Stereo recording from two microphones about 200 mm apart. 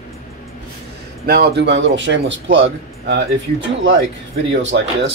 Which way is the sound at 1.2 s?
50° right (ahead or behind).